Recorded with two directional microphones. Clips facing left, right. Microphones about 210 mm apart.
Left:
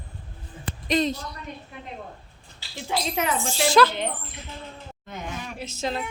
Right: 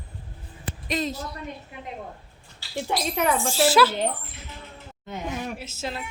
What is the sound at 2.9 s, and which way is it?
Speech, 55° right (ahead or behind).